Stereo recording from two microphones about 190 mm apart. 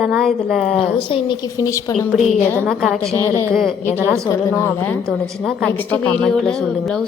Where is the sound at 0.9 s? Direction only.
25° left (ahead or behind).